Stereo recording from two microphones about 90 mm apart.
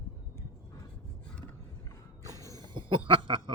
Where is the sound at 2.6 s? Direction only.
65° right (ahead or behind).